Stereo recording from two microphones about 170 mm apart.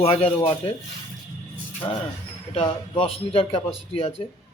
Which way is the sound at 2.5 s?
30° left (ahead or behind).